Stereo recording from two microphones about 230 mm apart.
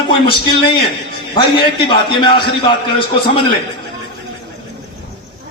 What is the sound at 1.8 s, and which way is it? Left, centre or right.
A man's voice, left.